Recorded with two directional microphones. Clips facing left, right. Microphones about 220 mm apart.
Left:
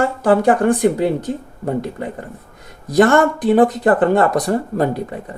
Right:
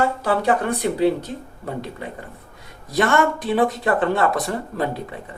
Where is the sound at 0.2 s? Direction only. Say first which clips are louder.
Left 6 dB; 50° left (ahead or behind).